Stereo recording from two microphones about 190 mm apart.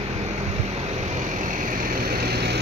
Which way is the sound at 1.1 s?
40° right (ahead or behind).